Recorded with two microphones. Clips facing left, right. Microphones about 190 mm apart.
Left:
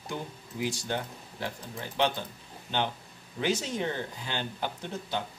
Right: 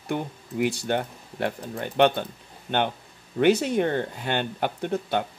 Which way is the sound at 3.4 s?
60° right (ahead or behind).